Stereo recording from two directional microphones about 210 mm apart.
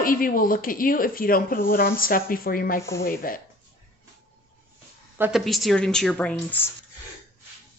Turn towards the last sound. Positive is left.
turn(degrees=5)  # may be behind; listen again after turning